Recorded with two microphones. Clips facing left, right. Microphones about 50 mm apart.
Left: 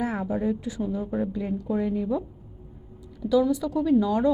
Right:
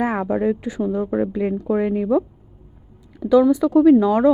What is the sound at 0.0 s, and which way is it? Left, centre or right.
Speech, right.